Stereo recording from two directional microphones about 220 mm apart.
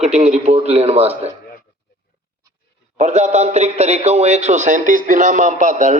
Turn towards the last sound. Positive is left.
turn(degrees=-35)  # may be behind; listen again after turning